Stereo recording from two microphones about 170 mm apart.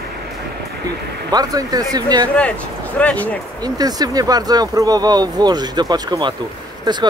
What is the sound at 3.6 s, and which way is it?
Speech, 25° right (ahead or behind).